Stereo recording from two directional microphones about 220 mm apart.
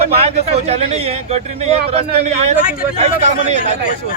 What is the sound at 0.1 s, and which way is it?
Speech, 30° right (ahead or behind).